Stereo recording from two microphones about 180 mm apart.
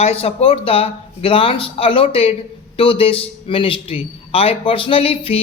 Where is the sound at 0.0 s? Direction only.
35° left (ahead or behind).